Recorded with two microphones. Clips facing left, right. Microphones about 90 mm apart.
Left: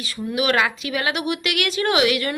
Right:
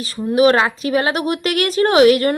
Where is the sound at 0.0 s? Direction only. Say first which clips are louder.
Right 9 dB; 35° right (ahead or behind).